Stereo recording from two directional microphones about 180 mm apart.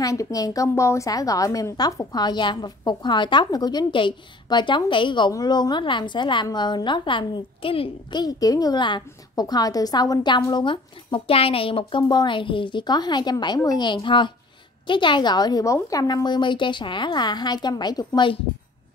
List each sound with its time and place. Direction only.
0.0 s a woman's voice: 20° left (ahead or behind)